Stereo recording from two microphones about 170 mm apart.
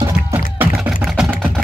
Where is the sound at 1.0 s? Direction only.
Centre (ahead or behind).